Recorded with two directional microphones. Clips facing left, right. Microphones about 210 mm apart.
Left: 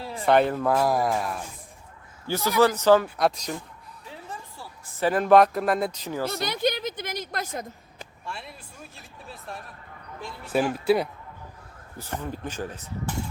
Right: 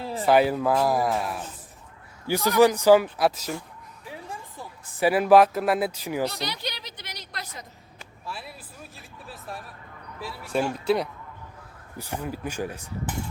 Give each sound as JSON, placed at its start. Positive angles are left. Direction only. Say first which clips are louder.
{"t": 0.3, "sound": "speech", "louder": "even", "side_deg": -5}
{"t": 2.2, "sound": "speech", "louder": "right 2 dB", "side_deg": -15}
{"t": 6.3, "sound": "a sound", "louder": "left 8 dB", "side_deg": 50}
{"t": 8.3, "sound": "speech", "louder": "right 1 dB", "side_deg": -5}
{"t": 10.8, "sound": "speech", "louder": "left 2 dB", "side_deg": 5}
{"t": 11.9, "sound": "speech", "louder": "right 1 dB", "side_deg": -10}